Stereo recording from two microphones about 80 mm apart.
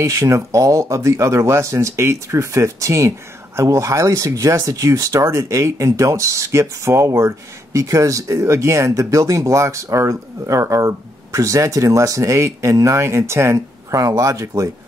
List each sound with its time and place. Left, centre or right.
0.0 s speech: right